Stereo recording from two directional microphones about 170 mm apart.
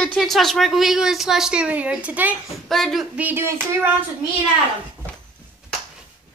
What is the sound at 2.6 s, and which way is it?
Speech, centre (ahead or behind).